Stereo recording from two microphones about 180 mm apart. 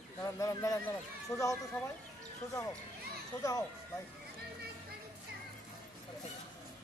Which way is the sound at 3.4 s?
20° left (ahead or behind).